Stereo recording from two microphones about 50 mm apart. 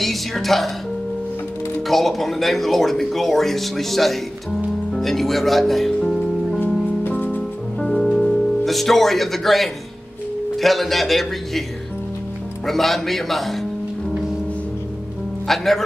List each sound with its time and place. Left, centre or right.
0.0 s speech: centre
1.9 s speech: centre
7.1 s music: left
7.8 s music: centre
10.6 s speech: centre
12.6 s speech: centre
15.4 s speech: centre